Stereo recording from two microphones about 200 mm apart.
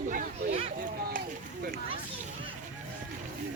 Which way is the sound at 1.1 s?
45° right (ahead or behind).